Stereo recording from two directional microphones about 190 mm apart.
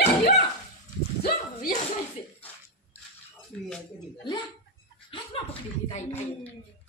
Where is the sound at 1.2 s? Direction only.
55° left (ahead or behind).